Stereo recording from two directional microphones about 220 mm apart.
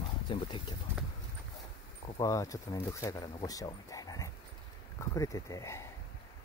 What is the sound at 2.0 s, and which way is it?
Speech, 20° left (ahead or behind).